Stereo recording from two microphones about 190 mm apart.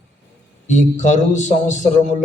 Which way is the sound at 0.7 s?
40° left (ahead or behind).